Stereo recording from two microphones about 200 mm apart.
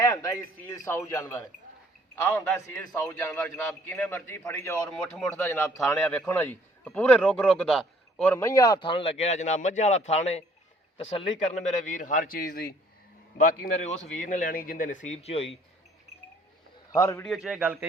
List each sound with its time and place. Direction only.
0.0 s a man's voice: 15° left (ahead or behind)
16.9 s a man's voice: 15° left (ahead or behind)
17.2 s a man's voice: centre (ahead or behind)